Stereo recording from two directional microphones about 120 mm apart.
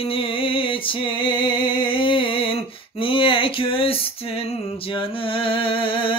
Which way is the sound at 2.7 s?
45° left (ahead or behind).